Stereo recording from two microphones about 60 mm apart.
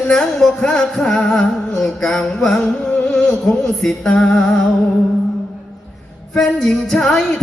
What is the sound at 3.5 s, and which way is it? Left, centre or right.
Music, centre.